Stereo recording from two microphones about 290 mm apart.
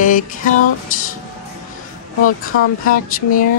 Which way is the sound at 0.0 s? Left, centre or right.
Left.